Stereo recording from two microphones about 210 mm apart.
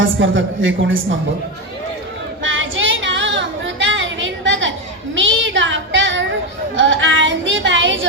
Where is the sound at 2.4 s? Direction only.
65° right (ahead or behind).